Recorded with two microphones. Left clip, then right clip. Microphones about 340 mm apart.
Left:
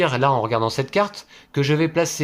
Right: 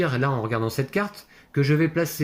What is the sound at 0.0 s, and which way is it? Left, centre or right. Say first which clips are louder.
Speech: left 6 dB; centre.